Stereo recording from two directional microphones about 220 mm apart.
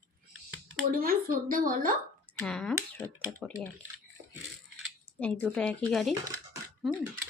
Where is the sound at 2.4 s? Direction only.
5° left (ahead or behind).